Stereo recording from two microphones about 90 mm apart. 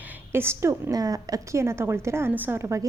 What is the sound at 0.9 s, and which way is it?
A woman's voice, 45° right (ahead or behind).